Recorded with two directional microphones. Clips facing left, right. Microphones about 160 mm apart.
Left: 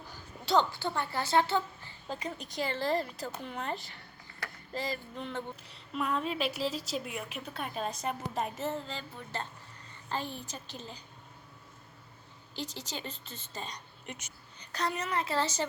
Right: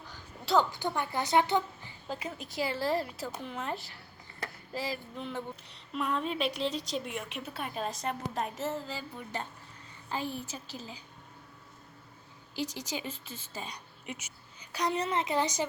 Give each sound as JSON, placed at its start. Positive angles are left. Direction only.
{"t": 0.7, "sound": "a woman's voice", "side_deg": -15}
{"t": 2.0, "sound": "a woman's voice", "side_deg": -5}
{"t": 12.5, "sound": "a woman's voice", "side_deg": -10}
{"t": 14.9, "sound": "speech", "side_deg": -25}